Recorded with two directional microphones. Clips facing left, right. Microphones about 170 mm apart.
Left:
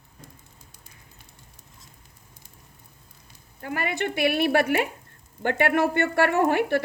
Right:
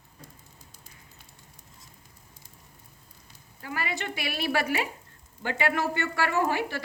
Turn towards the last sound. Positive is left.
turn(degrees=60)  # may be behind; listen again after turning